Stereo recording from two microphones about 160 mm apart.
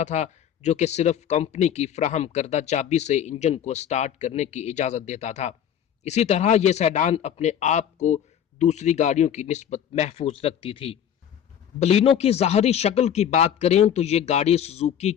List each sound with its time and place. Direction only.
0.0 s speech: 45° left (ahead or behind)